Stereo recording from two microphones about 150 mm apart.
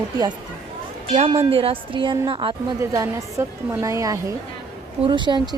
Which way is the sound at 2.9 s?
20° right (ahead or behind).